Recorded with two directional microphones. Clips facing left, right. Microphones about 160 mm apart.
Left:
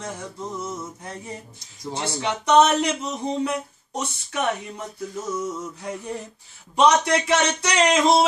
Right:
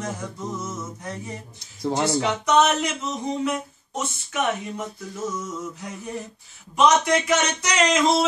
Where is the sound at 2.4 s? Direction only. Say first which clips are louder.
Left 4 dB; 30° left (ahead or behind).